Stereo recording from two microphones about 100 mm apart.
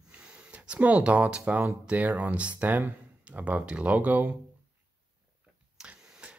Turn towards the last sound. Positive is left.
turn(degrees=-10)  # may be behind; listen again after turning